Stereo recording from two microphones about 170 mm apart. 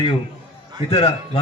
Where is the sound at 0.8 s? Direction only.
35° left (ahead or behind).